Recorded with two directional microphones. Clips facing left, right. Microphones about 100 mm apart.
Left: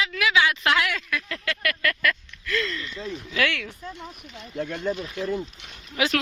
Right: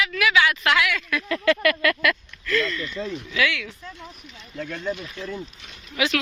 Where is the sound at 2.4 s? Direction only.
25° left (ahead or behind).